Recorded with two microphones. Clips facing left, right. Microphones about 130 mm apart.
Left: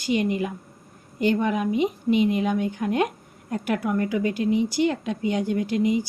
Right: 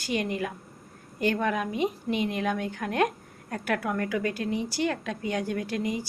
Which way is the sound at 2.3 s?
10° left (ahead or behind).